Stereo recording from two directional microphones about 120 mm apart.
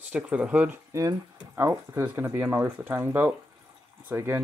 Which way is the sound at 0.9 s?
25° right (ahead or behind).